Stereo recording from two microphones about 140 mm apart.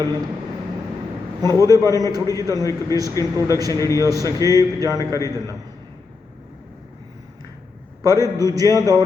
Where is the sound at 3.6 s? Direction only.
25° right (ahead or behind).